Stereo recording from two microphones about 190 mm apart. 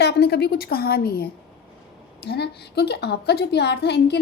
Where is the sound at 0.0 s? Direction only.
60° left (ahead or behind).